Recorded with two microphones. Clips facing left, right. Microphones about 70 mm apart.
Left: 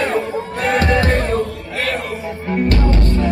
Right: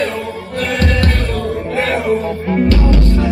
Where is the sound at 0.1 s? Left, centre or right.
Left.